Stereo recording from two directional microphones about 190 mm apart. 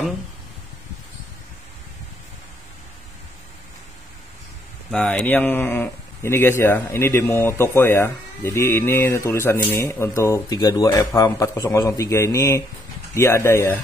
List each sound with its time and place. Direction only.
4.9 s speech: 5° left (ahead or behind)